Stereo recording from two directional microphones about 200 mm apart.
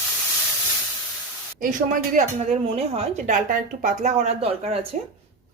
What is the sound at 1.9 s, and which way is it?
A woman's voice, 35° right (ahead or behind).